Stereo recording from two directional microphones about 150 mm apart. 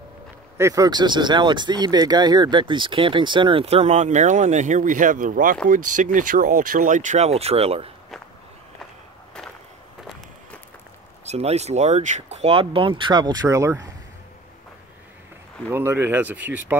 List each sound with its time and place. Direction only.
0.6 s speech: 20° right (ahead or behind); by 7.9 s 40° right (ahead or behind)
11.2 s speech: 45° right (ahead or behind); by 13.8 s 20° right (ahead or behind)
15.7 s speech: 15° right (ahead or behind)